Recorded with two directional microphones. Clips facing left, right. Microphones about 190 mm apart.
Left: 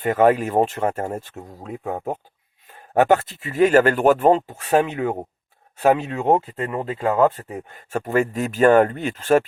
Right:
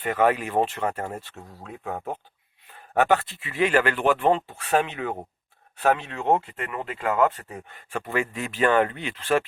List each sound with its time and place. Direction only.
0.0 s a man's voice: 45° left (ahead or behind)
6.3 s speech: 30° left (ahead or behind)
7.7 s speech: 45° left (ahead or behind)